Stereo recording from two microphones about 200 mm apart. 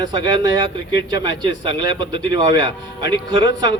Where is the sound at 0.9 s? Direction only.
65° left (ahead or behind).